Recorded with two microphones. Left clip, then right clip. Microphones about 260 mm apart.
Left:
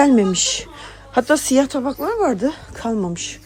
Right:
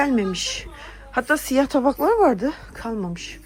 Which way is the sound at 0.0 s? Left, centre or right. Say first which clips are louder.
Left 7 dB; centre.